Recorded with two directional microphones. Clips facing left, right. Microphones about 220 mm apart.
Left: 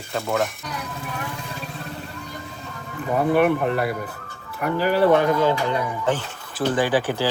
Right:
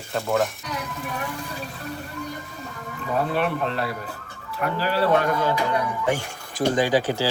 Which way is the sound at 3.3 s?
15° left (ahead or behind).